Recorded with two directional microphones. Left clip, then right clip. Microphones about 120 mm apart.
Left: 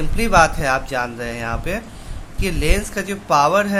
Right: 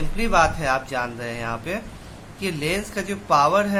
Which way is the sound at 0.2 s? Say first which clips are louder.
Left 4 dB; 25° left (ahead or behind).